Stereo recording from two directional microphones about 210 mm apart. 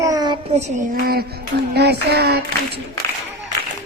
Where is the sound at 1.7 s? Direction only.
50° right (ahead or behind).